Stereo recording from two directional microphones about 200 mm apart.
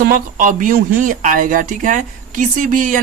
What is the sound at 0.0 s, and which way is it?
A woman's voice, 45° right (ahead or behind).